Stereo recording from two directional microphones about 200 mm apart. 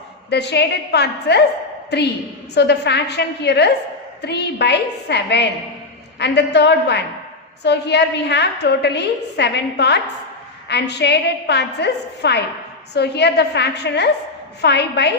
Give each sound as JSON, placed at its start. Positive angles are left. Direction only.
{"t": 0.3, "sound": "a woman's voice", "side_deg": 55}
{"t": 2.6, "sound": "a woman's voice", "side_deg": 55}